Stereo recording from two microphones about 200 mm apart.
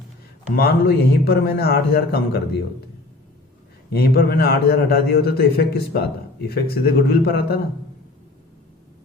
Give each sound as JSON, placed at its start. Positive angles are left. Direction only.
{"t": 0.5, "sound": "a man's voice", "side_deg": 50}
{"t": 3.8, "sound": "a man's voice", "side_deg": 50}